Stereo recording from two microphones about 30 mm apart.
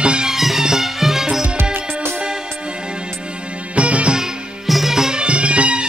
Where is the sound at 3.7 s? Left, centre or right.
Right.